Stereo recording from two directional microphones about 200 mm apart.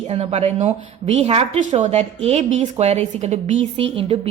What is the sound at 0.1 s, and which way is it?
Speech, 30° right (ahead or behind).